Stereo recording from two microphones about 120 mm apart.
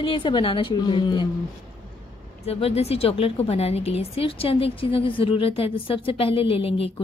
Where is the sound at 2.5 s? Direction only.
55° left (ahead or behind).